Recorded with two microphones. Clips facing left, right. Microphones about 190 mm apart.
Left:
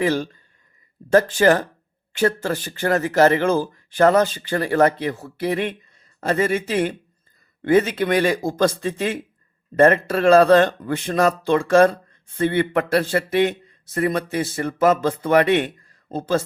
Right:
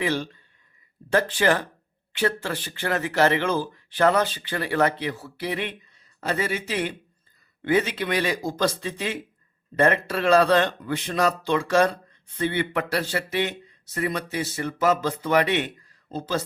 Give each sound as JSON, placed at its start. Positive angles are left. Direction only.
{"t": 0.0, "sound": "a man's voice", "side_deg": 45}